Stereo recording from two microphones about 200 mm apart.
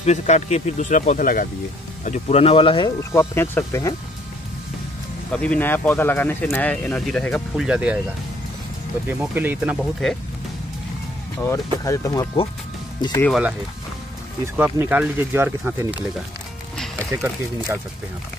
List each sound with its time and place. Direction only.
0.0 s speech: 35° left (ahead or behind)
3.0 s speech: 10° left (ahead or behind)
5.3 s speech: 5° left (ahead or behind)
9.2 s speech: 10° right (ahead or behind)
11.3 s speech: 15° left (ahead or behind)
14.4 s speech: 10° right (ahead or behind)
16.7 s music: 5° left (ahead or behind)
17.1 s speech: 15° right (ahead or behind)